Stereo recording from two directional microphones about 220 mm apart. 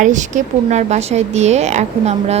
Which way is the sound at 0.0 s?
35° right (ahead or behind).